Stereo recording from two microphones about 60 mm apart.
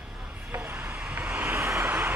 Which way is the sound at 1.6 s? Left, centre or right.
Right.